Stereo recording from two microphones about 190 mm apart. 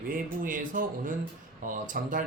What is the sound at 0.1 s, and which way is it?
A woman's voice, 45° right (ahead or behind).